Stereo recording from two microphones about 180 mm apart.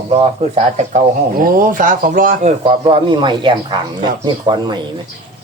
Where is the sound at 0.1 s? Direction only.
35° right (ahead or behind); by 2.5 s 50° right (ahead or behind).